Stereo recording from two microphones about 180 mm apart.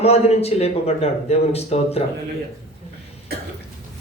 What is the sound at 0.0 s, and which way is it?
Speech, 35° left (ahead or behind).